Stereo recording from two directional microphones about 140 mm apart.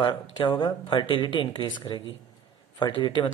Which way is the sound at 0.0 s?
30° left (ahead or behind).